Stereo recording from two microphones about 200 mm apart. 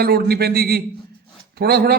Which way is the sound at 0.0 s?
55° right (ahead or behind).